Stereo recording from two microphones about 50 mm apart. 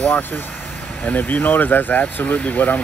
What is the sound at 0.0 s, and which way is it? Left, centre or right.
Speech, left.